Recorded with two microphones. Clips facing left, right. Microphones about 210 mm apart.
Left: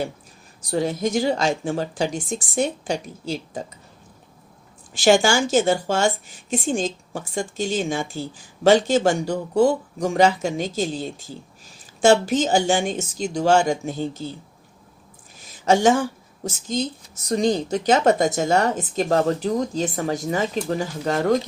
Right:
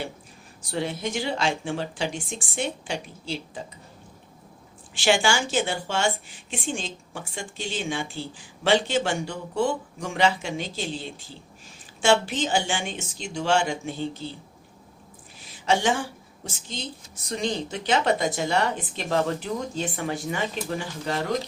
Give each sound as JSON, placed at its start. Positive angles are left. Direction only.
{"t": 0.7, "sound": "a woman's voice", "side_deg": 40}
{"t": 4.9, "sound": "a woman's voice", "side_deg": 40}
{"t": 15.4, "sound": "a woman's voice", "side_deg": 45}